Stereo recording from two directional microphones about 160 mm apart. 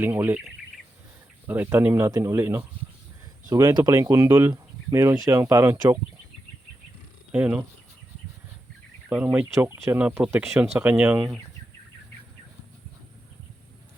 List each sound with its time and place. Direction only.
0.0 s speech: 15° right (ahead or behind)
1.5 s speech: 10° right (ahead or behind)
7.3 s speech: 10° right (ahead or behind)
9.0 s speech: 5° right (ahead or behind)